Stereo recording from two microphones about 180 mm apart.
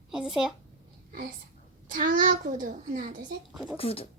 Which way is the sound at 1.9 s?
50° right (ahead or behind).